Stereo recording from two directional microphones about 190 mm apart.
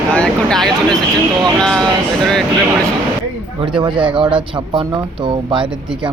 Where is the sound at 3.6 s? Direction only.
25° right (ahead or behind).